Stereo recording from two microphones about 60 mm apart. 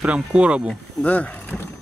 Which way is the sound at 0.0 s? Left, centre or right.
Right.